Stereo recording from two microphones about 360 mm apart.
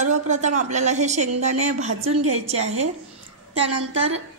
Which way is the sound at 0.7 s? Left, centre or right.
Centre.